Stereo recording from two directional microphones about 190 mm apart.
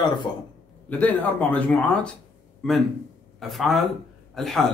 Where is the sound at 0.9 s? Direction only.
10° left (ahead or behind).